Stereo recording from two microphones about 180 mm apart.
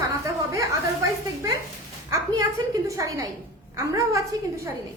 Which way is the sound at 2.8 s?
15° right (ahead or behind).